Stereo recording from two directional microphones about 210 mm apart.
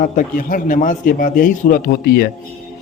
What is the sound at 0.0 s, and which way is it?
A man's voice, 40° left (ahead or behind).